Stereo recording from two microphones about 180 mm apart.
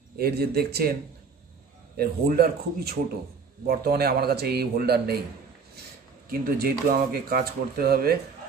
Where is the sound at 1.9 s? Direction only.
55° right (ahead or behind).